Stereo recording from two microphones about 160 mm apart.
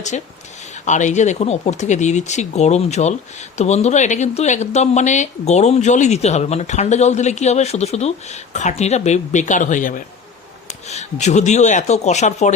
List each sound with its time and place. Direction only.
0.1 s speech: 45° left (ahead or behind)